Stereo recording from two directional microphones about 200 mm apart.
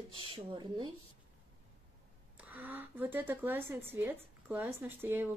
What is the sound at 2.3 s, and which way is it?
Speech, 10° right (ahead or behind).